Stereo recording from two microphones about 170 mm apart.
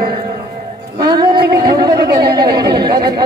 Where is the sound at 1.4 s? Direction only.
70° right (ahead or behind).